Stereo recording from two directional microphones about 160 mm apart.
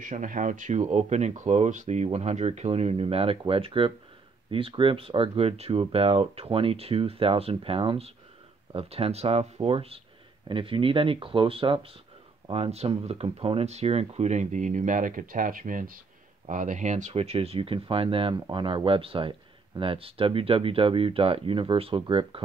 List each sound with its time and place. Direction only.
0.0 s speech: 55° right (ahead or behind); by 22.4 s 35° right (ahead or behind)